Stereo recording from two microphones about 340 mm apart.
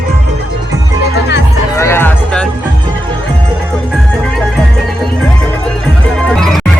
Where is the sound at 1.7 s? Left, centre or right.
Centre.